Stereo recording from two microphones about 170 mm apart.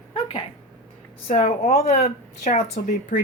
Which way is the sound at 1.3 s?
45° left (ahead or behind).